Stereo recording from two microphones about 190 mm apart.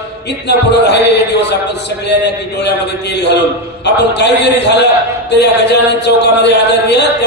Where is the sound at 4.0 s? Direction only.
60° left (ahead or behind).